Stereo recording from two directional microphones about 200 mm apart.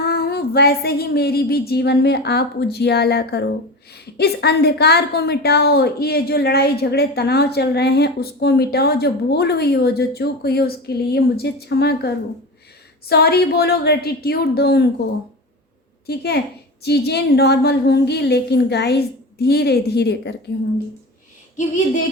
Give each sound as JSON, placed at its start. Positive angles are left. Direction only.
{"t": 0.0, "sound": "a woman's voice", "side_deg": 50}
{"t": 16.0, "sound": "a woman's voice", "side_deg": 55}